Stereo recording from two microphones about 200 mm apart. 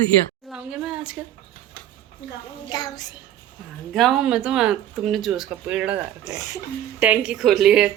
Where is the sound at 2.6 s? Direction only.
20° left (ahead or behind).